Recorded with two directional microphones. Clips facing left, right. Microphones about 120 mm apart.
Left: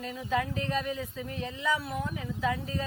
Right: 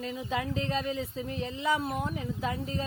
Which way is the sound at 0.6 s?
30° right (ahead or behind).